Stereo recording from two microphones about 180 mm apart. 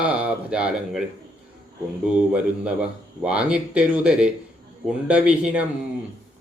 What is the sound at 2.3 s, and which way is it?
Speech, 5° right (ahead or behind).